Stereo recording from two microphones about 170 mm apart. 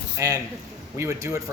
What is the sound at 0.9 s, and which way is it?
Speech, 20° right (ahead or behind).